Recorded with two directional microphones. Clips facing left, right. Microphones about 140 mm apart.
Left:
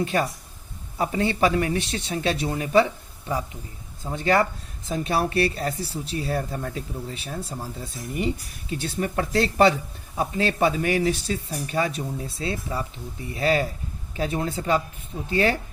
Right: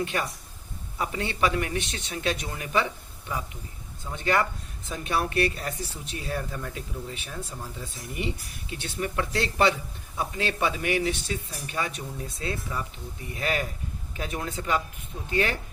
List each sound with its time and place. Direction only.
0.0 s speech: 35° left (ahead or behind)
4.0 s speech: 35° left (ahead or behind)